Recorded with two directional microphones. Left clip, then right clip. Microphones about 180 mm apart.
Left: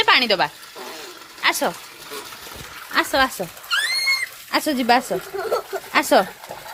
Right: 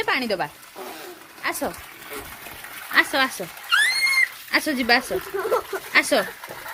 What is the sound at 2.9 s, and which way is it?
Speech, 15° left (ahead or behind).